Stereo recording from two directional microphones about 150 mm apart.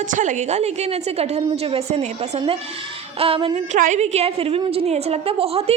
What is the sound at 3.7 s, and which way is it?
A woman's voice, 55° right (ahead or behind).